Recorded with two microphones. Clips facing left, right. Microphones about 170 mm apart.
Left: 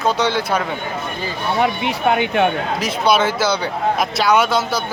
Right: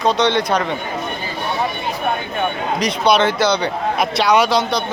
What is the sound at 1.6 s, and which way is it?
Speech, 75° left (ahead or behind).